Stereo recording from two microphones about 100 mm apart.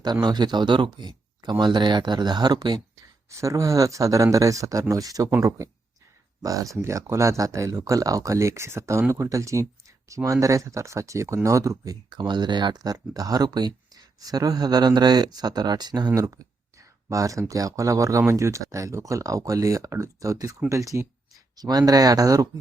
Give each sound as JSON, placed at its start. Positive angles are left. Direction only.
{"t": 0.0, "sound": "speech", "side_deg": -45}
{"t": 3.2, "sound": "speech", "side_deg": -30}